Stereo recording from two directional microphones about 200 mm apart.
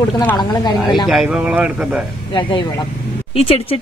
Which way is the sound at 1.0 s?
5° right (ahead or behind).